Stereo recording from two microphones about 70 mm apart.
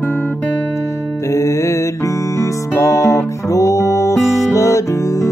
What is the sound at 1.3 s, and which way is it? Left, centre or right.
Music, left.